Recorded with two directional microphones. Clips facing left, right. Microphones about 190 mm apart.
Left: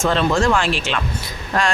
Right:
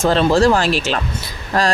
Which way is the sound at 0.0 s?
35° right (ahead or behind).